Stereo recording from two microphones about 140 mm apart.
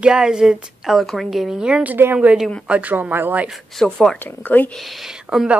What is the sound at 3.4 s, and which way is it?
Speech, centre (ahead or behind).